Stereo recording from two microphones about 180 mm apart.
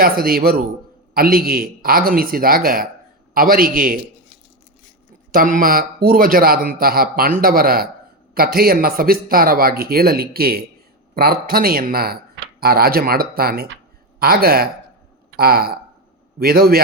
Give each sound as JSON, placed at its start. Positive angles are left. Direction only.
{"t": 0.0, "sound": "speech", "side_deg": -55}
{"t": 5.3, "sound": "speech", "side_deg": -50}